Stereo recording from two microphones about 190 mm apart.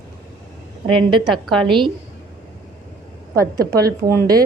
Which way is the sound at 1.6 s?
25° right (ahead or behind).